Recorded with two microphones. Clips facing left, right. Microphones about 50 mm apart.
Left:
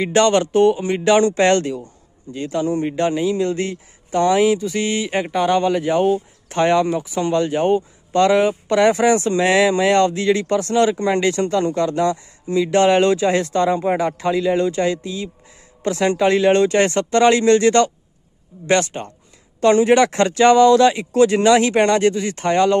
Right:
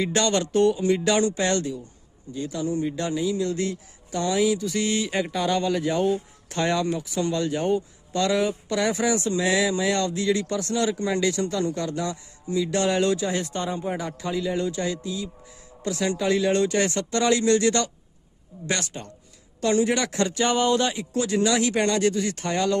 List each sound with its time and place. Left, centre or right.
0.0 s speech: left
1.2 s speech: left
13.3 s speech: left
13.9 s speech: left